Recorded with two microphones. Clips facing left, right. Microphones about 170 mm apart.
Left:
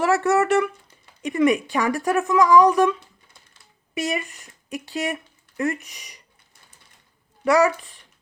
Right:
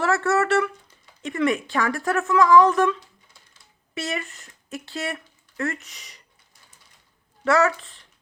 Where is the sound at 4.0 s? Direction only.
15° left (ahead or behind).